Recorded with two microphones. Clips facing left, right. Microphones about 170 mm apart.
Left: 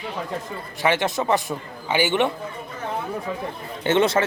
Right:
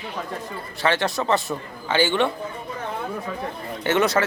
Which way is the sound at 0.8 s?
15° left (ahead or behind).